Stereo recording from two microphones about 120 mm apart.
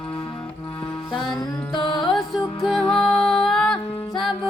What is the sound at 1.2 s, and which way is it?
Music, 5° left (ahead or behind).